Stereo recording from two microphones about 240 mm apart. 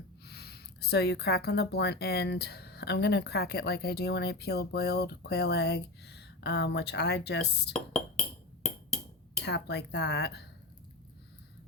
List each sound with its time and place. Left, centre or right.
0.3 s speech: left
7.7 s a sound: centre
9.4 s speech: left